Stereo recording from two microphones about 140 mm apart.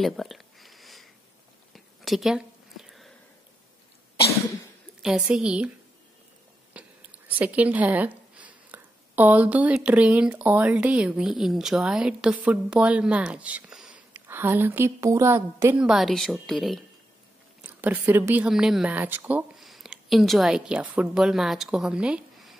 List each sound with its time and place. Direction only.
0.0 s a sound: centre (ahead or behind)
5.0 s speech: 5° right (ahead or behind)
6.7 s speech: 10° right (ahead or behind)
15.8 s a woman's voice: centre (ahead or behind)
17.6 s speech: 15° right (ahead or behind)
19.5 s a woman's voice: centre (ahead or behind)